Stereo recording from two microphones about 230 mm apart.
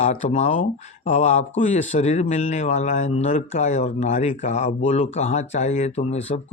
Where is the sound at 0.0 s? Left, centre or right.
Left.